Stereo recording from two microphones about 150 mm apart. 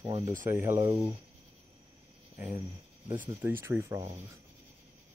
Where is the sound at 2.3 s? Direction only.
15° right (ahead or behind).